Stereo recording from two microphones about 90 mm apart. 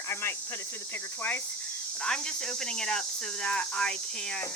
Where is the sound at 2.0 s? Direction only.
10° left (ahead or behind).